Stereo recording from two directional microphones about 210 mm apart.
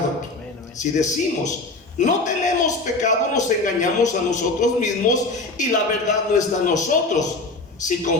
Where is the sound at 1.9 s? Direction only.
35° left (ahead or behind).